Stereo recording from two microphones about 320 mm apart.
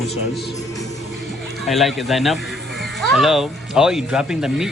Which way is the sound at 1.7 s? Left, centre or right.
Centre.